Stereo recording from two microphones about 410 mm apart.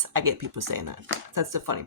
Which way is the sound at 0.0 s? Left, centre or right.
Right.